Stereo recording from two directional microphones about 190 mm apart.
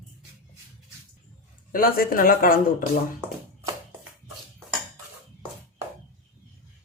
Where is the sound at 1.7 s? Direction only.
50° left (ahead or behind).